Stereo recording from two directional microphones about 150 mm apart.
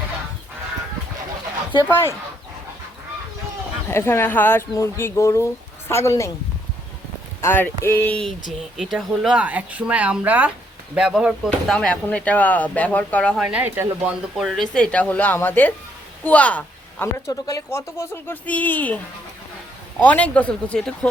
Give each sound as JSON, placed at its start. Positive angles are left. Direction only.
{"t": 1.9, "sound": "speech", "side_deg": 20}
{"t": 3.8, "sound": "speech", "side_deg": 15}
{"t": 7.4, "sound": "speech", "side_deg": 15}
{"t": 8.4, "sound": "speech", "side_deg": 0}
{"t": 13.4, "sound": "speech", "side_deg": -10}
{"t": 14.3, "sound": "speech", "side_deg": 0}
{"t": 20.1, "sound": "speech", "side_deg": 10}